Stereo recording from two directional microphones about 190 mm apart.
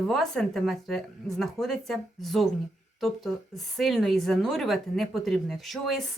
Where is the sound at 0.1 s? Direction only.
Centre (ahead or behind).